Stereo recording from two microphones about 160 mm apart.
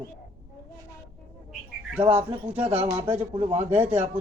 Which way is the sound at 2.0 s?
45° right (ahead or behind).